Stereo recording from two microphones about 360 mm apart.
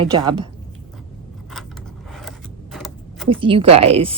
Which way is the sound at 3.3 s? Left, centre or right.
Centre.